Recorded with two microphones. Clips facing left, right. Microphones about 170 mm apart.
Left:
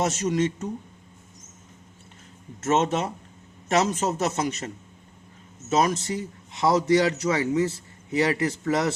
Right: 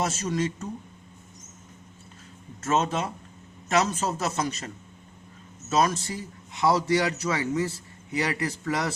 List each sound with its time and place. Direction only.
0.0 s a man's voice: 20° left (ahead or behind)
2.6 s a man's voice: 25° left (ahead or behind)